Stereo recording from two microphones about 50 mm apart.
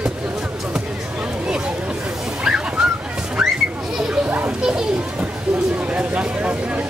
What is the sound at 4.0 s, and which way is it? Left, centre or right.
Children playing, centre.